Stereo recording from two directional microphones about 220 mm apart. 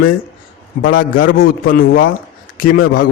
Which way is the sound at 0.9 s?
40° left (ahead or behind).